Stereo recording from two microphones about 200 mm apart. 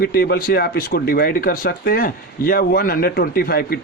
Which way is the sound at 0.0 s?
50° left (ahead or behind).